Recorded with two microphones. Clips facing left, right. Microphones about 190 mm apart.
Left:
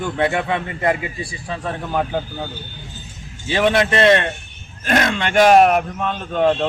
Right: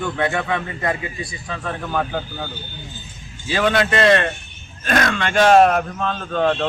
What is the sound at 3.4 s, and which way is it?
A man's voice, 25° left (ahead or behind).